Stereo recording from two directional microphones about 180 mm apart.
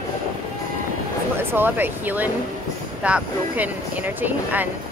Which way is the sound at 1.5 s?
10° right (ahead or behind).